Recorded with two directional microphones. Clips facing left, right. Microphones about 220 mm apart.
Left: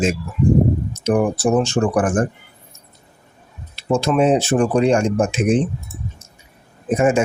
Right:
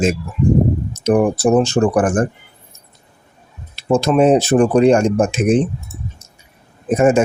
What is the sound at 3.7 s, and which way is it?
Speech, 40° right (ahead or behind).